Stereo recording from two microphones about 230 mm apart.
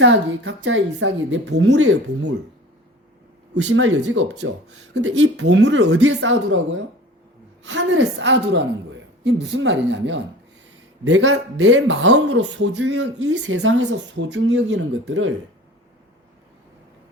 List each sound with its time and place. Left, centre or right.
0.0 s a man's voice: right
3.7 s a man's voice: right
7.6 s a woman's voice: right